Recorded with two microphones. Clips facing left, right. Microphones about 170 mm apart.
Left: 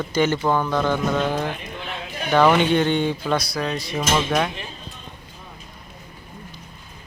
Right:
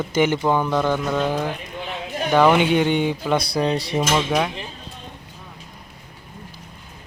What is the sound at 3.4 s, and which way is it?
Speech, 30° right (ahead or behind).